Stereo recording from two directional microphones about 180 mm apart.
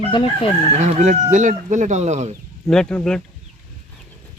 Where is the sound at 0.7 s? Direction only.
40° right (ahead or behind).